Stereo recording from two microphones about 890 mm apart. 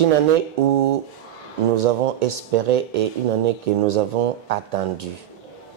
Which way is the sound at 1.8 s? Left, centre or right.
Right.